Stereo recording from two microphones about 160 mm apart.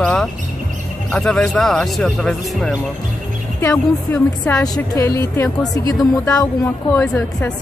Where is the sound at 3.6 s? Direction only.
20° left (ahead or behind).